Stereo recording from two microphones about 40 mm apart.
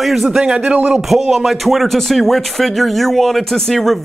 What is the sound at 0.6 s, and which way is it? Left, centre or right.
Speech, right.